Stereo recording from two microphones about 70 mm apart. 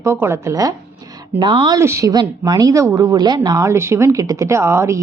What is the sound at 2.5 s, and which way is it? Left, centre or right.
Speech, right.